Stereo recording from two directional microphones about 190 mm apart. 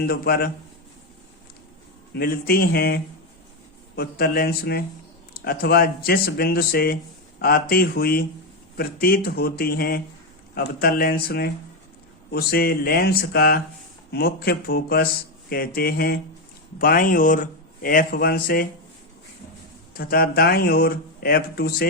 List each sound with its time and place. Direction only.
0.0 s a man's voice: 55° left (ahead or behind)
2.1 s a man's voice: 50° left (ahead or behind)
19.9 s a man's voice: 50° left (ahead or behind)